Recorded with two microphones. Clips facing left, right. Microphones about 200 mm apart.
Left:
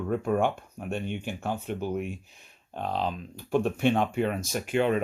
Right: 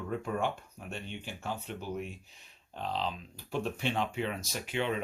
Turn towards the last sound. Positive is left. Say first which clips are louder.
# left 8 dB
turn(degrees=50)  # may be behind; listen again after turning